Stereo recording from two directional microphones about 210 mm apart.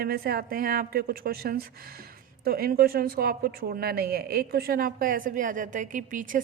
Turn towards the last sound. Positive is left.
turn(degrees=-40)  # may be behind; listen again after turning